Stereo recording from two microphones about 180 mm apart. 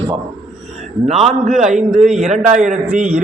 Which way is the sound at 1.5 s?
Centre (ahead or behind).